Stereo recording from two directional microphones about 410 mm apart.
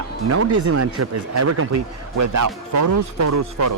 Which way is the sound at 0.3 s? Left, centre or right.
Right.